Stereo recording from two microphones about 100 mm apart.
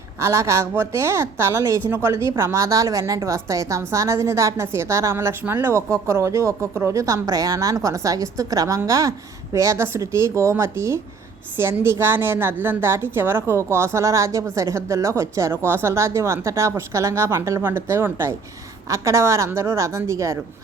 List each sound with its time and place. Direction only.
0.2 s a woman's voice: 30° right (ahead or behind)